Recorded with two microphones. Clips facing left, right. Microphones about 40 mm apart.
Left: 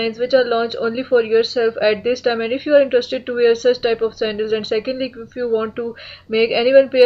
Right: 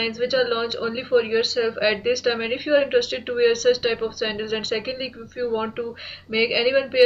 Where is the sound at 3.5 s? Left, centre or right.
Left.